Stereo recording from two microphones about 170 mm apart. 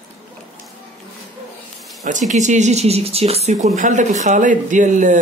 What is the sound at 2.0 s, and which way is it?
Speech, 45° right (ahead or behind).